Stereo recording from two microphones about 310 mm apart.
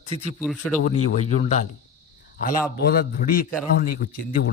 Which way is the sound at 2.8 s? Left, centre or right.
Left.